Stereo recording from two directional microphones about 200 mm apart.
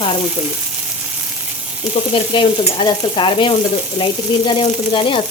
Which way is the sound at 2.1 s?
25° left (ahead or behind).